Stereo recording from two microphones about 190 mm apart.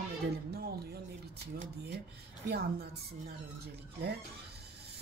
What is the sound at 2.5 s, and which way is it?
Speech, 55° right (ahead or behind).